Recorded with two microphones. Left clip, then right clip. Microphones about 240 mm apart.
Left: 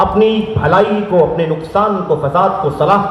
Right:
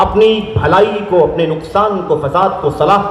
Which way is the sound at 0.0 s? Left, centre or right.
Right.